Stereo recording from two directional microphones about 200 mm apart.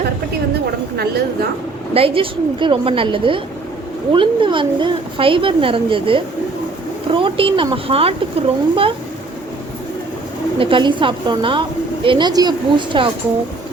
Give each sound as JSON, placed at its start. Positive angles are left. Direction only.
{"t": 1.9, "sound": "speech", "side_deg": -30}
{"t": 10.6, "sound": "speech", "side_deg": -25}